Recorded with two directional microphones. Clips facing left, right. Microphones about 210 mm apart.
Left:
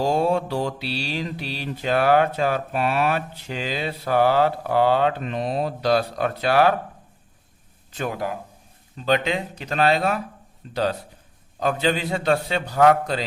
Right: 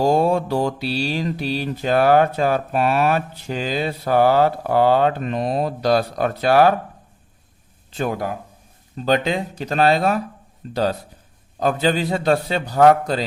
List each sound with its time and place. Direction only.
0.0 s mantra: 45° right (ahead or behind)
9.0 s a man's voice: 40° right (ahead or behind)
10.6 s mantra: 45° right (ahead or behind)
11.6 s a man's voice: 40° right (ahead or behind)